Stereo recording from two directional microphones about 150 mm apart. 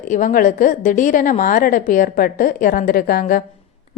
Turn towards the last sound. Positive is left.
turn(degrees=85)